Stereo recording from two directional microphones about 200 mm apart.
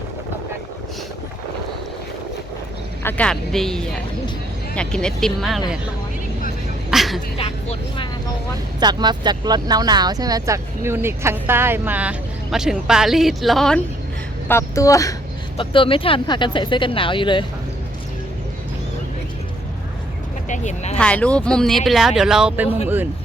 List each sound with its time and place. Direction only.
3.0 s speech: 10° left (ahead or behind)
6.9 s a sound: centre (ahead or behind)
7.3 s speech: 30° left (ahead or behind)
8.8 s speech: 20° right (ahead or behind); by 13.8 s centre (ahead or behind)
14.4 s speech: 15° left (ahead or behind)
20.5 s speech: 35° left (ahead or behind)
21.0 s speech: 5° left (ahead or behind)